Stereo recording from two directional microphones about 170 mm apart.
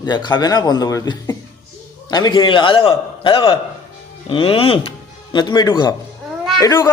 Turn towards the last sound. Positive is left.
turn(degrees=15)  # may be behind; listen again after turning